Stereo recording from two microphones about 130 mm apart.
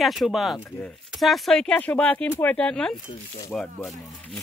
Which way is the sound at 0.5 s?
15° left (ahead or behind).